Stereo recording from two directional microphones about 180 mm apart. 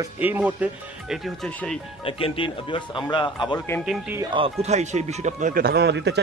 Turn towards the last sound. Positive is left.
turn(degrees=-70)  # may be behind; listen again after turning